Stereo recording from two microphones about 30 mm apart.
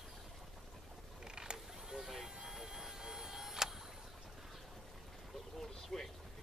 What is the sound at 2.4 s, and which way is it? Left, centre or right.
Vehicle, centre.